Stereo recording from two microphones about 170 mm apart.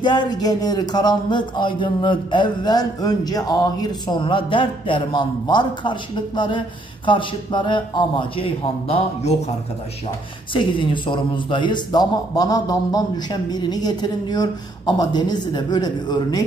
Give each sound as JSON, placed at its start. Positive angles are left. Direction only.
{"t": 0.0, "sound": "speech", "side_deg": 25}
{"t": 10.5, "sound": "speech", "side_deg": 30}